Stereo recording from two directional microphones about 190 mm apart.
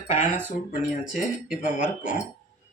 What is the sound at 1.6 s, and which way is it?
Speech, 45° left (ahead or behind).